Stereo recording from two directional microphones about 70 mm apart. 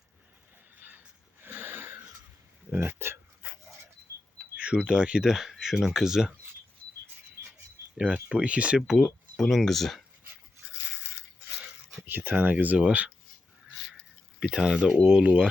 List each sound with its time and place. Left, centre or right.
0.8 s a sound: right
2.7 s speech: right
4.5 s speech: centre
7.9 s speech: centre
9.4 s speech: centre
12.0 s speech: right
14.5 s speech: centre